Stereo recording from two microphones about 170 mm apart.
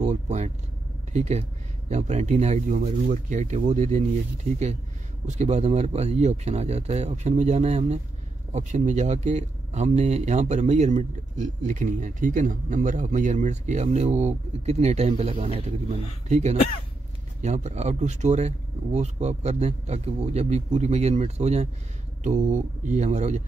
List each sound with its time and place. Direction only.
0.0 s speech: 45° right (ahead or behind)
5.2 s speech: 40° right (ahead or behind)